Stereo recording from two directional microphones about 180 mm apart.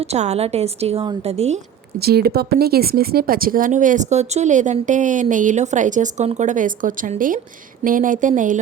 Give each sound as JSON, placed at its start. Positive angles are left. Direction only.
{"t": 0.1, "sound": "a woman's voice", "side_deg": -35}
{"t": 2.0, "sound": "speech", "side_deg": -60}